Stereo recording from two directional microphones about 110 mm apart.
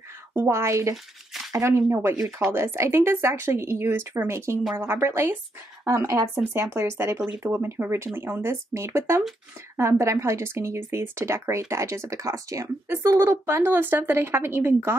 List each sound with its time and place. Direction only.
0.3 s speech: 20° right (ahead or behind)